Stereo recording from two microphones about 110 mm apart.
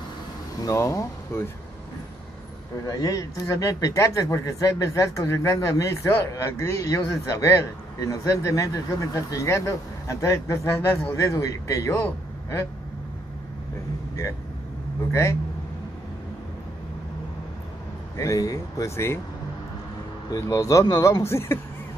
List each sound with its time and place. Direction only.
0.6 s speech: 30° left (ahead or behind)
2.8 s speech: 30° left (ahead or behind)
18.1 s speech: 25° left (ahead or behind)
20.2 s speech: 30° left (ahead or behind)